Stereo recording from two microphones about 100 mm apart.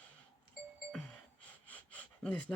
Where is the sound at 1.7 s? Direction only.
15° left (ahead or behind).